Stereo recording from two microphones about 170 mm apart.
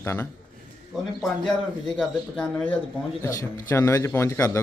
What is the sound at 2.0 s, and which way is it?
Speech, 5° left (ahead or behind).